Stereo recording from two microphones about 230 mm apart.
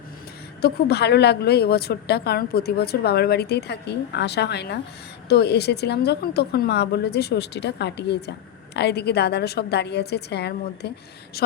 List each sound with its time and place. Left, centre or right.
0.6 s speech: left